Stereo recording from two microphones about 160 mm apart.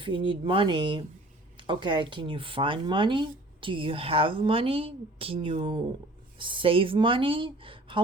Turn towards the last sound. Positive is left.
turn(degrees=-35)  # may be behind; listen again after turning